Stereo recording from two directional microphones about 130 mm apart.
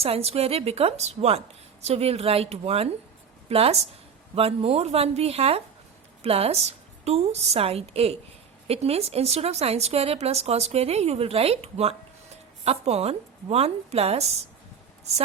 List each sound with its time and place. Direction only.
0.0 s speech: 50° right (ahead or behind)